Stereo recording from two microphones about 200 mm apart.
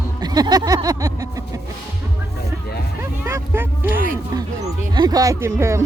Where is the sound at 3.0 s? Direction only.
15° right (ahead or behind).